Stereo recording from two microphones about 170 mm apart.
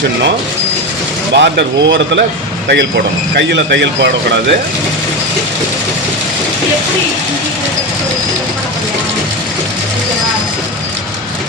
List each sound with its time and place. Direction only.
1.4 s speech: 90° right
3.3 s speech: 90° right